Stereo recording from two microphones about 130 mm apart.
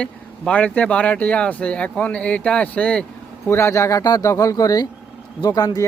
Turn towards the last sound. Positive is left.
turn(degrees=30)  # may be behind; listen again after turning